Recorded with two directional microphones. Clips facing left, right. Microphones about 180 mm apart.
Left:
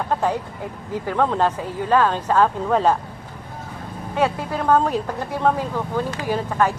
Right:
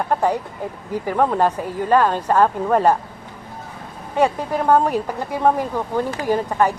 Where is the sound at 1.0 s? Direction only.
10° right (ahead or behind).